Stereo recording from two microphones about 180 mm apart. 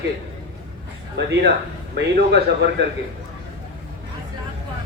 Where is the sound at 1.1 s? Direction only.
70° right (ahead or behind).